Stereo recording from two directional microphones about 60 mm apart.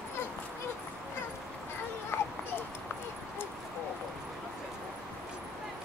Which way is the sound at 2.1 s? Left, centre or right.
Left.